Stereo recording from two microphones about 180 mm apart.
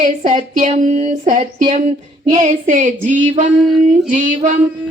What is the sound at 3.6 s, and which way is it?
Female singing, centre (ahead or behind).